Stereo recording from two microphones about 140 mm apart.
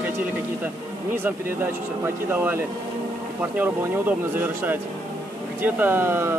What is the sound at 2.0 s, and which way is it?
Speech, 15° right (ahead or behind).